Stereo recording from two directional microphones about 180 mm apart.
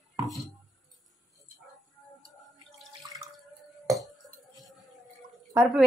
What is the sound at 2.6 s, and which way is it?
Water, 20° right (ahead or behind).